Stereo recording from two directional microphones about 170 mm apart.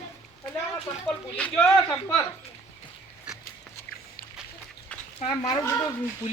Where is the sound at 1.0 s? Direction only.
5° left (ahead or behind).